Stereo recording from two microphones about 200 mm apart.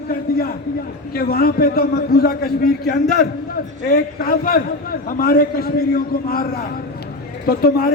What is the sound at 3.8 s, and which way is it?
A man's voice, 45° left (ahead or behind).